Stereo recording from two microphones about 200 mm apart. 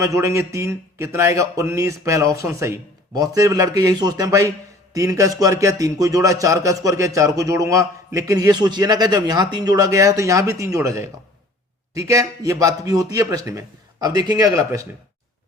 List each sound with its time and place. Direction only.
0.0 s a man's voice: 15° right (ahead or behind)